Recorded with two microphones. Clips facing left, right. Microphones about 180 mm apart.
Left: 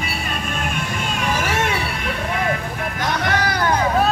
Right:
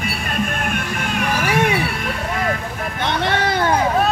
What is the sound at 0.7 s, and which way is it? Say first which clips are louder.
Music: right 2 dB; 60° right (ahead or behind).